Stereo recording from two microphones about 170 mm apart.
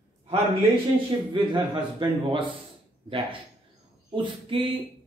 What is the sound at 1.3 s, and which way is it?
A man's voice, 30° right (ahead or behind).